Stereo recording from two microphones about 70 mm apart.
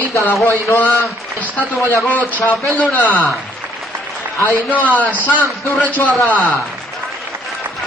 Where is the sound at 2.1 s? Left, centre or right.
Left.